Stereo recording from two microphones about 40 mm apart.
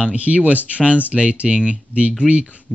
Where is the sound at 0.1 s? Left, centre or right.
Right.